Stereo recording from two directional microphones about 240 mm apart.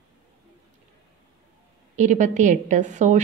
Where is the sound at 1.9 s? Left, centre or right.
Right.